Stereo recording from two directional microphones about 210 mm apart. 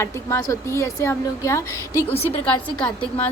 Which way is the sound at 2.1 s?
30° left (ahead or behind).